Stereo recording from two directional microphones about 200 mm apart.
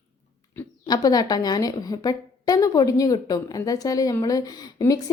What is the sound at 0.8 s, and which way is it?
A woman's voice, 20° left (ahead or behind).